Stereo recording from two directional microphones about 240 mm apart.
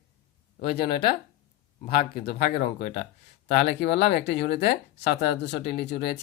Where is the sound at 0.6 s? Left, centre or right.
Left.